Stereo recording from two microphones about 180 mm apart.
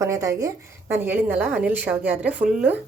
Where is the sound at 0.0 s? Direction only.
15° right (ahead or behind).